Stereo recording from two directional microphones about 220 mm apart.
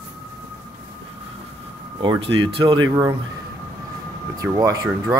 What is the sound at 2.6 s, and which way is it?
Speech, 15° right (ahead or behind).